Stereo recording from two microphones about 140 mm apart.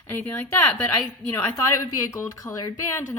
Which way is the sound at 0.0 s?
15° left (ahead or behind).